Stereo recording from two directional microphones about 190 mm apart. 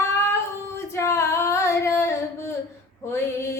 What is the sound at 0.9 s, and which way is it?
Female singing, 15° left (ahead or behind).